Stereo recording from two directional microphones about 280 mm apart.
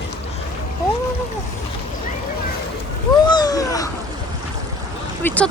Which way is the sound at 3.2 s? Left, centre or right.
Centre.